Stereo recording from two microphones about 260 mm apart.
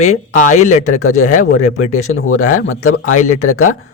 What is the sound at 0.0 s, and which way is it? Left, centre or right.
Speech, left.